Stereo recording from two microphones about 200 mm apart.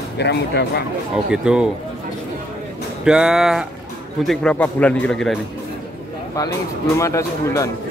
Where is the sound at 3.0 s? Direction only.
5° right (ahead or behind).